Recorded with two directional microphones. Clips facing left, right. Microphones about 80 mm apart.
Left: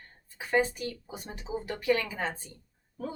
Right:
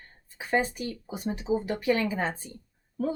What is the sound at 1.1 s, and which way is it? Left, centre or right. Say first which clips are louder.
Speech: right 8 dB; centre.